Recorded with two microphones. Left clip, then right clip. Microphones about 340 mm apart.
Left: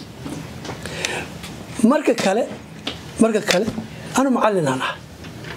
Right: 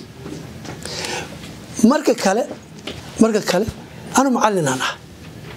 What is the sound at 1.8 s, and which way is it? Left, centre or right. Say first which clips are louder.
A woman's voice: right 1 dB; right.